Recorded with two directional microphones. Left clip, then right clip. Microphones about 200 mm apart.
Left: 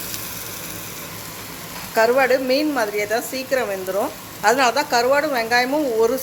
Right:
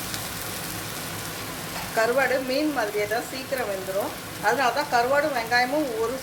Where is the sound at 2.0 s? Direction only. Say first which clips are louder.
Left 6 dB; 45° left (ahead or behind).